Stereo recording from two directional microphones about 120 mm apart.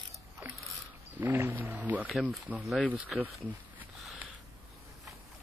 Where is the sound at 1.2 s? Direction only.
15° right (ahead or behind); by 2.9 s centre (ahead or behind).